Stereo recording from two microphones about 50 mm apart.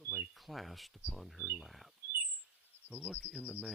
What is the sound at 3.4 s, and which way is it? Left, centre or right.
Speech, left.